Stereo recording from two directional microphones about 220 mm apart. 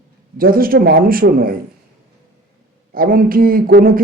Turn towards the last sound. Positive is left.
turn(degrees=-40)  # may be behind; listen again after turning